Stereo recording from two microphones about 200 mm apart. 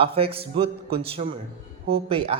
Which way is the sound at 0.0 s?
30° right (ahead or behind).